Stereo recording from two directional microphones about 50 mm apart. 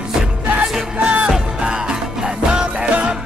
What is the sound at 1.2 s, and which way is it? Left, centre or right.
Music, centre.